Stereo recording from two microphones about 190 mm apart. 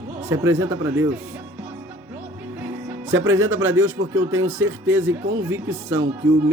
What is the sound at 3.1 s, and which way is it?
Speech, 85° right.